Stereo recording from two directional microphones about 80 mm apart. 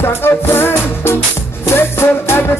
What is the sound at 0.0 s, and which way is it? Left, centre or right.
Music, left.